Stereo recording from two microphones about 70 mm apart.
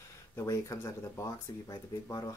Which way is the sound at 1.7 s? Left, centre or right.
Left.